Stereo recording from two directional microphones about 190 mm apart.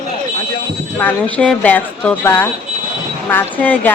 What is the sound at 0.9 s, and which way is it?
Speech, 5° left (ahead or behind).